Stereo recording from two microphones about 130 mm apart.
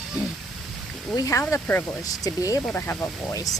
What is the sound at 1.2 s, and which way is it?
Speech, 25° left (ahead or behind).